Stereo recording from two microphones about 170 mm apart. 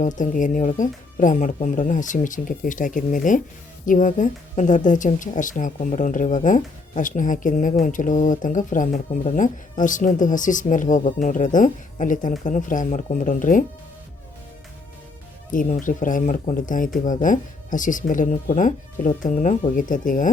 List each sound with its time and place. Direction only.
0.0 s a woman's voice: 50° left (ahead or behind)
15.5 s a woman's voice: 50° left (ahead or behind)